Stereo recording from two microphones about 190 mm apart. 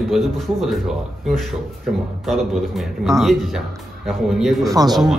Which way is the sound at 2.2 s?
Centre (ahead or behind).